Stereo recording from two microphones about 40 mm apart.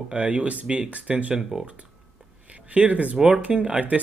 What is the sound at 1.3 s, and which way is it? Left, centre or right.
Speech, centre.